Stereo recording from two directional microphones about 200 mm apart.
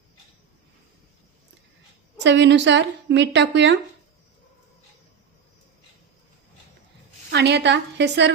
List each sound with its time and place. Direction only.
2.1 s a woman's voice: 60° right (ahead or behind)
7.3 s a woman's voice: 60° right (ahead or behind)